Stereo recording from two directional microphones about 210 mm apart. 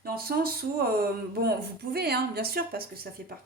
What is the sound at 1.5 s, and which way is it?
Speech, 50° right (ahead or behind).